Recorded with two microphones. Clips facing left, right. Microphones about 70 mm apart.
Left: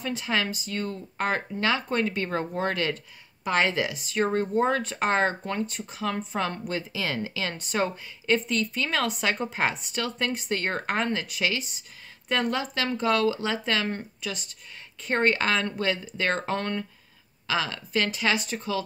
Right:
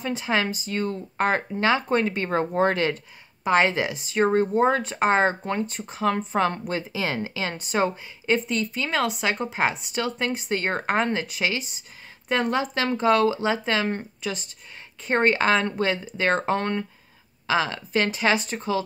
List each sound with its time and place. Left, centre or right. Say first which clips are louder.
0.0 s speech: right 3 dB; right